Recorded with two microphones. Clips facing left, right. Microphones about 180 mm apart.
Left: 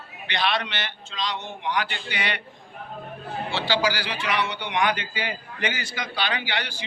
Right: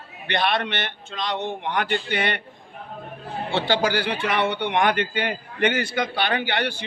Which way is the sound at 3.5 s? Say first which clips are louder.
Right 3 dB; 55° right (ahead or behind).